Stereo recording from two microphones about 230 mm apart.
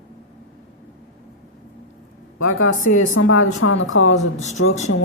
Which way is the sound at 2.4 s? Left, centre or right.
Left.